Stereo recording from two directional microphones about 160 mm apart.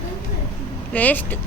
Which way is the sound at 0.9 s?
10° left (ahead or behind).